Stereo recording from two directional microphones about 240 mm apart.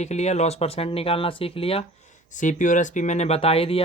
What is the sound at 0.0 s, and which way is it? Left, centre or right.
Speech, left.